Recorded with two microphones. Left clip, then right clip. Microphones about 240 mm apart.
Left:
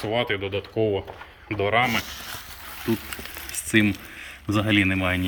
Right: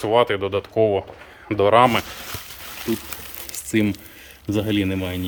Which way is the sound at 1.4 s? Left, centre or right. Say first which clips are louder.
Right 7 dB; right.